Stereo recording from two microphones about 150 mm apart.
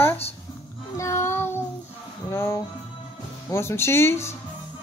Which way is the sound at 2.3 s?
15° left (ahead or behind).